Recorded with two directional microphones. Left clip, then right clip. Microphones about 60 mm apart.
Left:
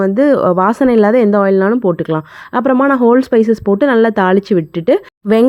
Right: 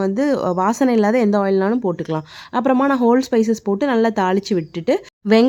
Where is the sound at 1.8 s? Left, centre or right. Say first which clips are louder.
Left 7 dB; left.